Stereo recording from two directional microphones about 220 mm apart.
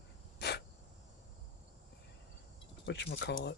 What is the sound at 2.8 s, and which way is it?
Speech, 50° left (ahead or behind).